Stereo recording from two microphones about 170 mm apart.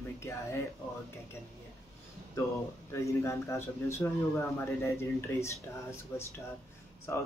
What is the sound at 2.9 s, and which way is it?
Speech, 15° left (ahead or behind).